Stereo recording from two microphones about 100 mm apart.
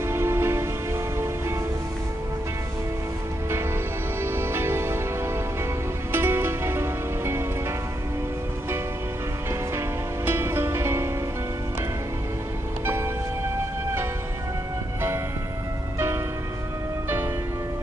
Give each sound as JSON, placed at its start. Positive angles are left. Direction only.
{"t": 0.0, "sound": "music", "side_deg": -25}
{"t": 4.2, "sound": "music", "side_deg": -25}
{"t": 9.5, "sound": "music", "side_deg": -25}
{"t": 12.8, "sound": "music", "side_deg": -25}